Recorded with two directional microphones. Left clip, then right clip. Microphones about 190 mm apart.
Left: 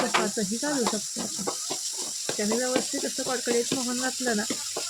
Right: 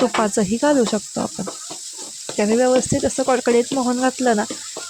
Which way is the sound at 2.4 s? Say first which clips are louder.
Right 11 dB; 40° right (ahead or behind).